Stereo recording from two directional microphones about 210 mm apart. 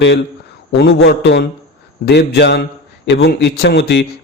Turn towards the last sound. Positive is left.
turn(degrees=50)  # may be behind; listen again after turning